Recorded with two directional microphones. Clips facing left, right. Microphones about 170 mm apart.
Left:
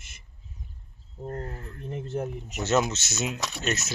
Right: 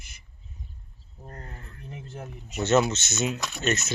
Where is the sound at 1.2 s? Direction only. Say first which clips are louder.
Left 9 dB; 50° left (ahead or behind).